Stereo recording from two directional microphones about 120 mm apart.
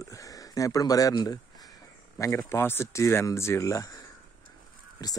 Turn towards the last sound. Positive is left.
turn(degrees=30)  # may be behind; listen again after turning